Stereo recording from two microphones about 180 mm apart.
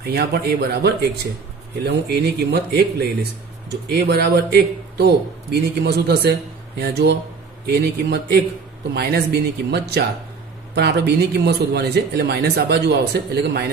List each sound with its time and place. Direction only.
0.0 s a man's voice: 60° right (ahead or behind)